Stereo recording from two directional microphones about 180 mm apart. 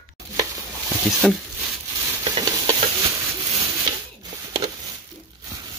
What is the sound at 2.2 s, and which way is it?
Stir, 20° right (ahead or behind).